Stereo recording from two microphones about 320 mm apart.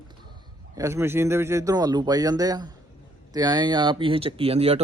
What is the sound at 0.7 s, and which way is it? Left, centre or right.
Speech, centre.